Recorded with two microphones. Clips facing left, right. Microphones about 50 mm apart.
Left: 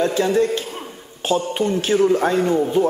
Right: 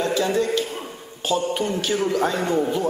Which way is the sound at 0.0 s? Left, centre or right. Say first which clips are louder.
Left 4 dB; left.